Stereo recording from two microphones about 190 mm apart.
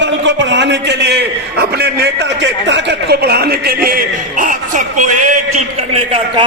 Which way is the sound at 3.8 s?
45° right (ahead or behind).